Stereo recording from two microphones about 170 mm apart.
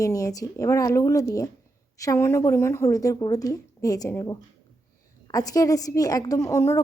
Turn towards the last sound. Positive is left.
turn(degrees=15)  # may be behind; listen again after turning